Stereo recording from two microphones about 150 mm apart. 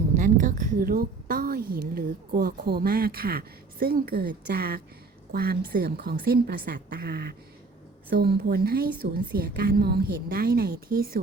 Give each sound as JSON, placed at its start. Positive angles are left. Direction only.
{"t": 0.2, "sound": "a woman's voice", "side_deg": -65}
{"t": 9.0, "sound": "a woman's voice", "side_deg": -80}